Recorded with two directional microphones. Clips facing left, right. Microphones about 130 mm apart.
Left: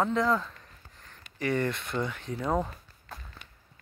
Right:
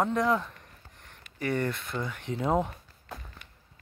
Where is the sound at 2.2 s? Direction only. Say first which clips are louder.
Right 5 dB; 20° right (ahead or behind).